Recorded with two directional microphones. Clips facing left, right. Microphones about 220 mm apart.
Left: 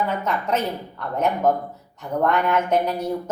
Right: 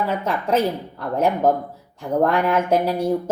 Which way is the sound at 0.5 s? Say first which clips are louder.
Right 4 dB; 30° right (ahead or behind).